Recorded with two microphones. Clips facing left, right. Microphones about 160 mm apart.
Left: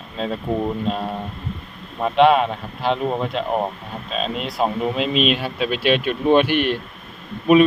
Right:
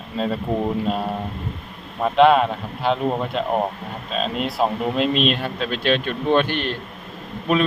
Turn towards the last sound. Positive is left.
turn(degrees=10)  # may be behind; listen again after turning